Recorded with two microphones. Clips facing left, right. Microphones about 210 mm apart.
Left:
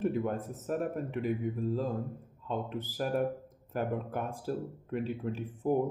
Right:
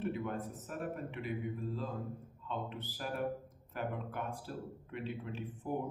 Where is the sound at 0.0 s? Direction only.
45° left (ahead or behind).